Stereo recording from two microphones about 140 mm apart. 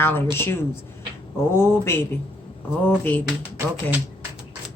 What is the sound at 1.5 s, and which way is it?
Speech, 20° left (ahead or behind).